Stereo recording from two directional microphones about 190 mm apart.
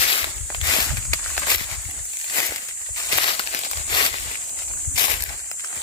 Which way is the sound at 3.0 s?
25° left (ahead or behind).